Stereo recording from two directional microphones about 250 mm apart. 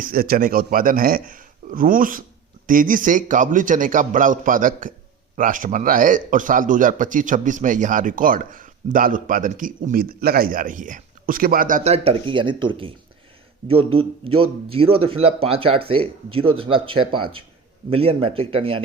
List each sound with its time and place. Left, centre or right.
0.0 s a man's voice: right